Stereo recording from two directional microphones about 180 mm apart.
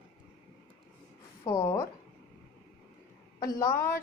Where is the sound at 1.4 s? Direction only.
20° left (ahead or behind).